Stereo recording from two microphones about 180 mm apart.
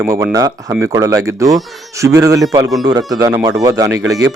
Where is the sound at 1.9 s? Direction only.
15° right (ahead or behind).